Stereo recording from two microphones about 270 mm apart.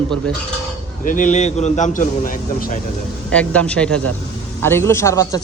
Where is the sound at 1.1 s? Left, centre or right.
Left.